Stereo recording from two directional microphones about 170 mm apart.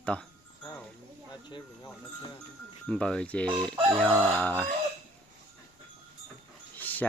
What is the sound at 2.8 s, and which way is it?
Speech, 5° left (ahead or behind).